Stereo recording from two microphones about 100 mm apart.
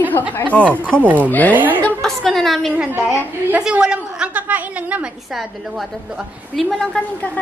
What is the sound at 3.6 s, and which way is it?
A woman's voice, 10° right (ahead or behind).